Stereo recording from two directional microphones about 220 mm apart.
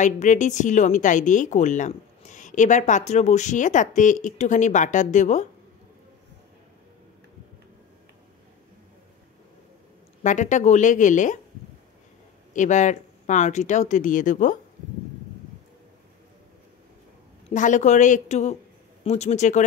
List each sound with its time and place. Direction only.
0.0 s a woman's voice: 35° left (ahead or behind)
10.2 s a woman's voice: 35° left (ahead or behind)
12.5 s a woman's voice: 35° left (ahead or behind)
17.5 s a woman's voice: 35° left (ahead or behind)